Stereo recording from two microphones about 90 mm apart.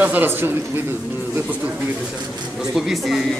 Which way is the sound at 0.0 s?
20° right (ahead or behind).